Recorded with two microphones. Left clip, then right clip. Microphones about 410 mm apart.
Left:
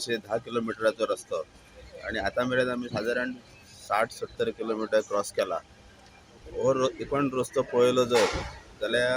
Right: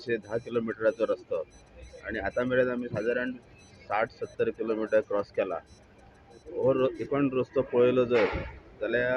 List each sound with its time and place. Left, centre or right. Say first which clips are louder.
0.0 s speech: left 1 dB; right
6.6 s speech: even; right